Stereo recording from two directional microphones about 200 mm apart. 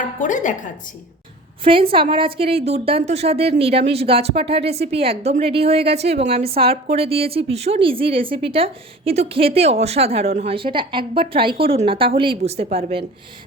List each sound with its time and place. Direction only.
0.2 s a woman's voice: 40° left (ahead or behind)
1.6 s a woman's voice: 25° right (ahead or behind)